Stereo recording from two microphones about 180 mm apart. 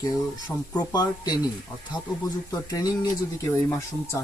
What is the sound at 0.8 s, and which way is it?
Speech, 20° left (ahead or behind).